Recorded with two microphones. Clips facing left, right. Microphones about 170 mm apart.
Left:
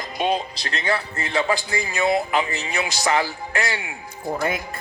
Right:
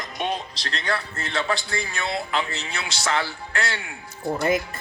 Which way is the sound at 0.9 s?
15° left (ahead or behind).